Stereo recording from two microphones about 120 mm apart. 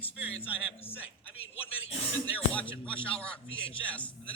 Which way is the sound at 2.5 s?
10° left (ahead or behind).